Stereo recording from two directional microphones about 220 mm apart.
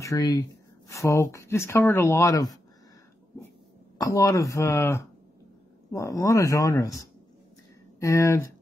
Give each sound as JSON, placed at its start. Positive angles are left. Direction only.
{"t": 0.0, "sound": "speech", "side_deg": 15}
{"t": 4.0, "sound": "speech", "side_deg": 15}